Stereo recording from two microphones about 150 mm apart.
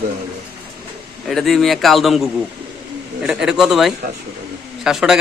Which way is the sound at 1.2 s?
Centre (ahead or behind).